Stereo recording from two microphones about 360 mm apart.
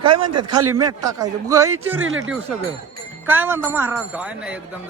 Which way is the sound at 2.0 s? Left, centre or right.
Right.